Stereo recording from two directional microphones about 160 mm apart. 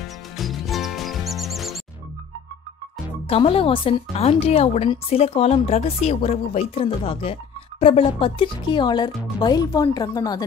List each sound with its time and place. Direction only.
0.4 s music: centre (ahead or behind)
3.3 s a woman's voice: 35° left (ahead or behind)